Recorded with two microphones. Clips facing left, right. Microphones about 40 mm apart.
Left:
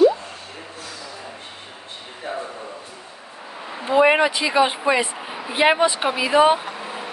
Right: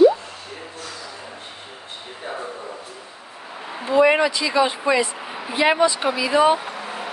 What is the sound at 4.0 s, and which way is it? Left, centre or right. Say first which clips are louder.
Speech: even; left.